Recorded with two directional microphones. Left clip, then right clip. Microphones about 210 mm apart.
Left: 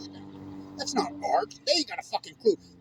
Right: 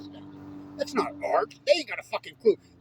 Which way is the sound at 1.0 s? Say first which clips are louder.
Even; centre (ahead or behind).